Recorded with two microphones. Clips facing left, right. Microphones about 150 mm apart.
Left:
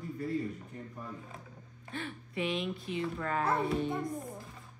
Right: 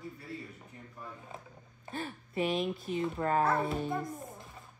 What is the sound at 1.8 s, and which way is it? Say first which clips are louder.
Speech: right 1 dB; 40° right (ahead or behind).